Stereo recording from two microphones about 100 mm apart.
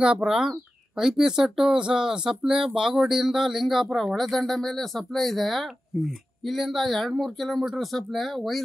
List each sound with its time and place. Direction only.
0.0 s speech: 10° right (ahead or behind)